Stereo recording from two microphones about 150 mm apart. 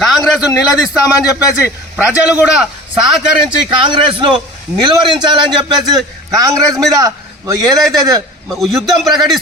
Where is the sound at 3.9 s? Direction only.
35° right (ahead or behind).